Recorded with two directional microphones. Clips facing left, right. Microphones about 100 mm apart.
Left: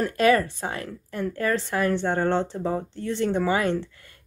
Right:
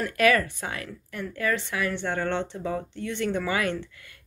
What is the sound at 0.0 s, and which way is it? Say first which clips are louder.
Speech: left 2 dB; 30° left (ahead or behind).